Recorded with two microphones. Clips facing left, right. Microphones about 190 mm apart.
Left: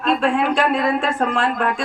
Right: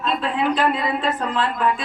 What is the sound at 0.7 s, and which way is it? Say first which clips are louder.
A man's voice: left 4 dB; 70° left (ahead or behind).